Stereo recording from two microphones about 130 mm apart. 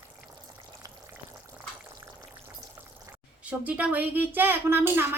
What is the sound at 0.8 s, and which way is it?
Frying, 25° right (ahead or behind).